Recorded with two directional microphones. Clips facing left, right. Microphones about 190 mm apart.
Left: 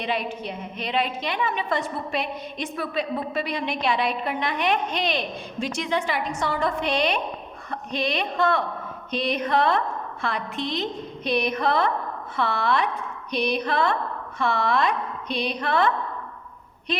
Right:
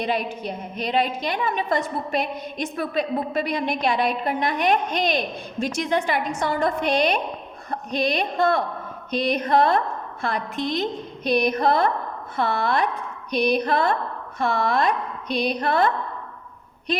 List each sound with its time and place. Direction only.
0.0 s a woman's voice: 40° right (ahead or behind)